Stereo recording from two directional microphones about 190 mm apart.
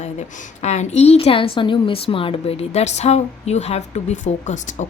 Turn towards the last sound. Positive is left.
turn(degrees=40)  # may be behind; listen again after turning